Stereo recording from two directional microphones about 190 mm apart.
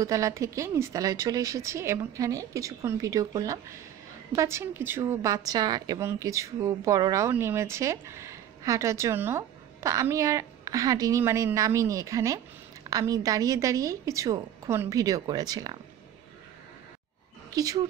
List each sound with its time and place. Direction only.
0.0 s a woman's voice: 15° right (ahead or behind)
17.5 s speech: 20° right (ahead or behind)